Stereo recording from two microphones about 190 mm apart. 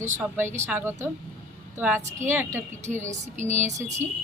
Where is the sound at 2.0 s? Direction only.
40° right (ahead or behind).